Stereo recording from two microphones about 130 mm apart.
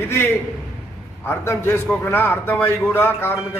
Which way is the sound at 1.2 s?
20° left (ahead or behind).